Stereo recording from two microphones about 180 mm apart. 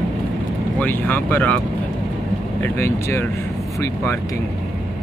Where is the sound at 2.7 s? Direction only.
15° left (ahead or behind).